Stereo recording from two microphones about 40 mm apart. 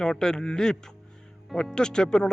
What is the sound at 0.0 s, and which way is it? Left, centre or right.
A man's voice, centre.